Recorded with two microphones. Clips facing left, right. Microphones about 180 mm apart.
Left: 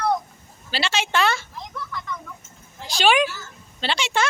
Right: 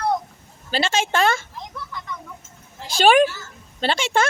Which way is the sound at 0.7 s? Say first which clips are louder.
Right 3 dB; 45° right (ahead or behind).